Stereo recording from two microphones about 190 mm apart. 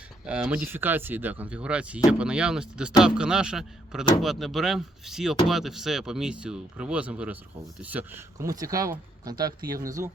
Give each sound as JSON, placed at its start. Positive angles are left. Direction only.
{"t": 0.3, "sound": "speech", "side_deg": -5}